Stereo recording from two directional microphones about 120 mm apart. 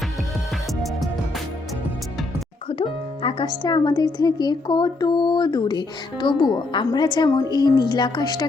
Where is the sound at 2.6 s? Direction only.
50° left (ahead or behind).